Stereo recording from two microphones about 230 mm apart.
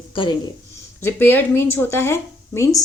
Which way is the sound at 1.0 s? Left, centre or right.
Centre.